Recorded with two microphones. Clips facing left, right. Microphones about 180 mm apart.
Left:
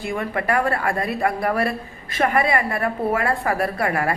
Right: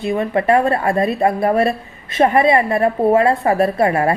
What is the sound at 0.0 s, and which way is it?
A woman's voice, 25° right (ahead or behind).